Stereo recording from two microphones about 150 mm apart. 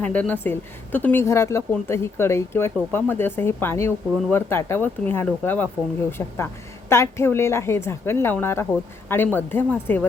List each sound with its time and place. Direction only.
0.0 s speech: 10° left (ahead or behind)